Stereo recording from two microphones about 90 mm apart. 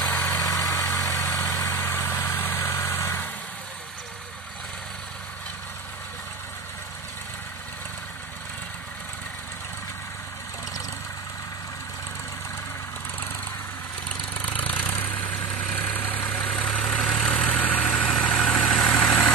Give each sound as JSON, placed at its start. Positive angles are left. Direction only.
{"t": 0.1, "sound": "vehicle", "side_deg": 25}
{"t": 0.4, "sound": "vehicle", "side_deg": 40}
{"t": 1.3, "sound": "vehicle", "side_deg": 25}
{"t": 14.0, "sound": "vehicle", "side_deg": 15}
{"t": 17.8, "sound": "vehicle", "side_deg": 5}